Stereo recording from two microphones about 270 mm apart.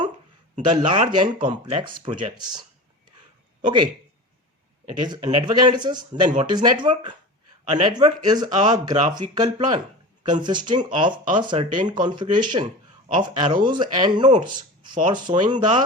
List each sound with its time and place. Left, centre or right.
0.6 s speech: centre
3.6 s speech: centre
4.9 s speech: centre